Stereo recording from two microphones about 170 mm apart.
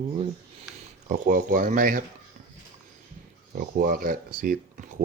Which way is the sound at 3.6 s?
60° right (ahead or behind).